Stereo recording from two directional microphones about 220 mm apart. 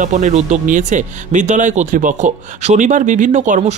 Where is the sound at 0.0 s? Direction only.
35° right (ahead or behind).